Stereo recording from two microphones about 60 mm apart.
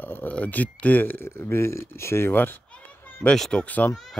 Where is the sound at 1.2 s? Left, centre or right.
Left.